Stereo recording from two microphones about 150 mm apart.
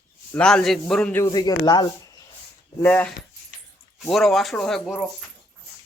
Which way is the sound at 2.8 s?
15° left (ahead or behind).